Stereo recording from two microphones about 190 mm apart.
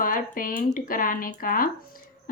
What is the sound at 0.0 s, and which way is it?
Speech, 45° left (ahead or behind).